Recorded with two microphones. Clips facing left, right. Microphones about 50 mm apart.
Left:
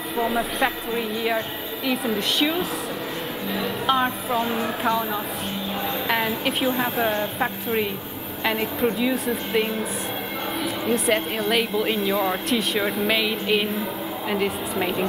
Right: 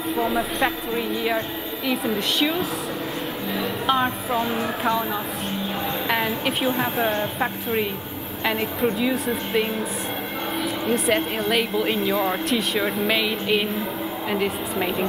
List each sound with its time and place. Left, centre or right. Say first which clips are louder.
0.1 s a woman's voice: even; centre
4.4 s speech: even; right
6.0 s a woman's voice: even; centre
6.7 s speech: even; right
7.3 s a woman's voice: even; centre